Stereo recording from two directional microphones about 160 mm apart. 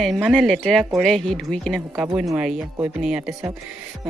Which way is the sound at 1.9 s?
15° right (ahead or behind).